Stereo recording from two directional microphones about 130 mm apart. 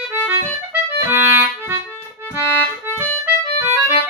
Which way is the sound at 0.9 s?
15° right (ahead or behind).